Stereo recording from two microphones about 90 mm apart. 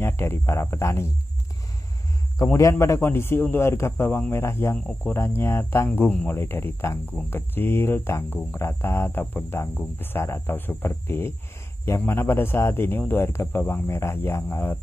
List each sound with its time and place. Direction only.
0.0 s speech: 30° left (ahead or behind)
2.4 s speech: 35° left (ahead or behind)
5.9 s speech: 15° left (ahead or behind)